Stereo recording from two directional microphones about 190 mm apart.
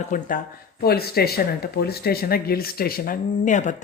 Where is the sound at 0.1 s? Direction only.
45° left (ahead or behind).